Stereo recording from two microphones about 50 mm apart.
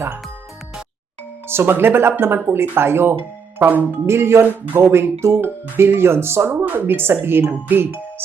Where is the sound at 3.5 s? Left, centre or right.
Right.